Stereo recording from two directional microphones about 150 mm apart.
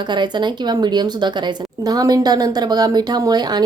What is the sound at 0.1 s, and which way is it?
A woman's voice, 30° right (ahead or behind).